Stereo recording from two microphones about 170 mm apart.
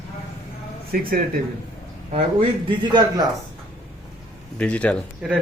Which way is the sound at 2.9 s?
25° right (ahead or behind).